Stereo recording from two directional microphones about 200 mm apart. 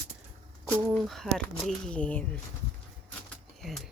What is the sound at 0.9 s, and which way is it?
Speech, centre (ahead or behind).